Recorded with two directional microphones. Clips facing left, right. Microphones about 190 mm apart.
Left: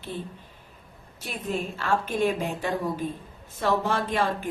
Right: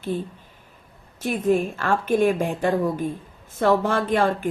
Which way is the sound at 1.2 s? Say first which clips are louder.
Right 10 dB; 50° right (ahead or behind).